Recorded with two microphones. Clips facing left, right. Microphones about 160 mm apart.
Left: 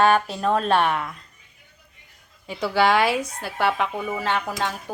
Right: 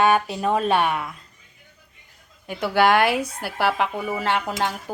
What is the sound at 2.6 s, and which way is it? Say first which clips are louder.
A woman's voice: right 1 dB; centre (ahead or behind).